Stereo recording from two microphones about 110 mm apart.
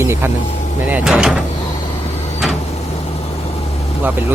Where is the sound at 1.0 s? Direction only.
5° right (ahead or behind).